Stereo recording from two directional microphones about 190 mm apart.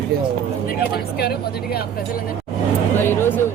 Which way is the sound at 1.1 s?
55° left (ahead or behind).